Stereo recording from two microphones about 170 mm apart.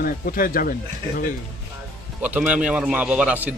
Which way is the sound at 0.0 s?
55° left (ahead or behind).